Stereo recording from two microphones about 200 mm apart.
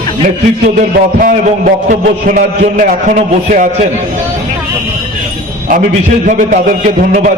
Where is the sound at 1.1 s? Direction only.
40° right (ahead or behind).